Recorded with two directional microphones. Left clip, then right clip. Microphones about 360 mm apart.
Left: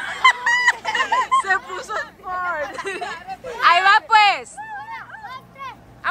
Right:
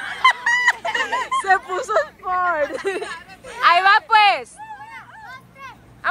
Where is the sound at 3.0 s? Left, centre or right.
Left.